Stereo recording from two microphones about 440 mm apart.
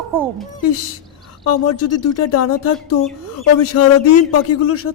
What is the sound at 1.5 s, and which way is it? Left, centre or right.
Speech, left.